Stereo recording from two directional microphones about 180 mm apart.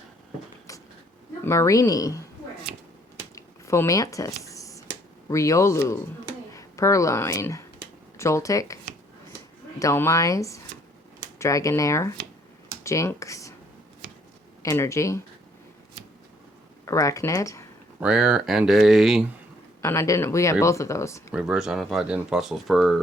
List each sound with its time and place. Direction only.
0.7 s a sound: 20° left (ahead or behind)
1.5 s speech: 15° left (ahead or behind)
3.2 s a sound: 15° left (ahead or behind)
5.3 s speech: 15° left (ahead or behind)
14.6 s speech: 15° left (ahead or behind)
16.8 s speech: 15° left (ahead or behind)
18.0 s speech: 5° right (ahead or behind)
19.8 s speech: 15° left (ahead or behind)
21.3 s speech: 5° right (ahead or behind)